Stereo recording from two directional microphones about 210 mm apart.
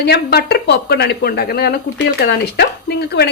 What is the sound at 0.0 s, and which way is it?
Speech, 50° left (ahead or behind).